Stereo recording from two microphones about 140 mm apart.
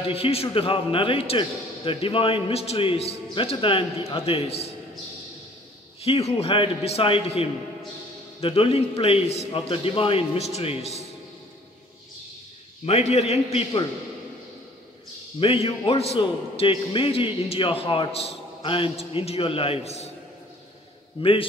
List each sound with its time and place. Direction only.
0.0 s a man's voice: 45° left (ahead or behind)
6.0 s a man's voice: 45° left (ahead or behind)
12.8 s a man's voice: 50° left (ahead or behind)
15.4 s a man's voice: 40° left (ahead or behind)
21.2 s a man's voice: 40° left (ahead or behind)